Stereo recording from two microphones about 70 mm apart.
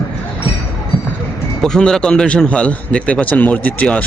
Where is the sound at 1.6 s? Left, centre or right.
Centre.